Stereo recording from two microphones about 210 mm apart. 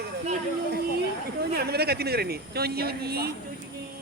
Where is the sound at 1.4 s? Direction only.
50° right (ahead or behind).